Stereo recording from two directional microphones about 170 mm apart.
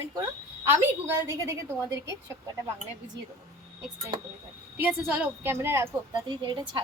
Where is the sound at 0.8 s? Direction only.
15° right (ahead or behind).